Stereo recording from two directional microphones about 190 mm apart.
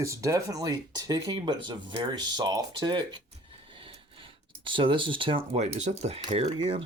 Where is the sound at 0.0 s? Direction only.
15° right (ahead or behind).